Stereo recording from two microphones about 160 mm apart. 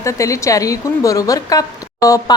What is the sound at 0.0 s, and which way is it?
A woman's voice, 20° left (ahead or behind).